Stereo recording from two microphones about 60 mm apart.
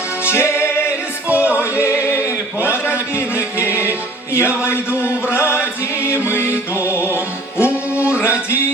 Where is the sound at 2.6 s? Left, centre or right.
Left.